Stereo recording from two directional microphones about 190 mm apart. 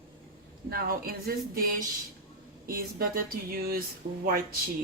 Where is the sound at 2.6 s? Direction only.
50° right (ahead or behind).